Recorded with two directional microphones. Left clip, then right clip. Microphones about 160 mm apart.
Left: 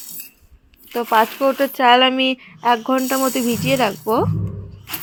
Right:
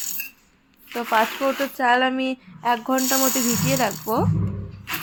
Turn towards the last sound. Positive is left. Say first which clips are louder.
# left 5 dB
turn(degrees=15)  # may be behind; listen again after turning